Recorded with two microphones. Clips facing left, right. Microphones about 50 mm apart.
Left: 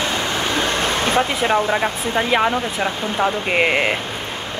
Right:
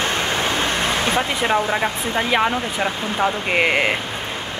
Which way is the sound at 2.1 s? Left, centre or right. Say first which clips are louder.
Left 2 dB; centre.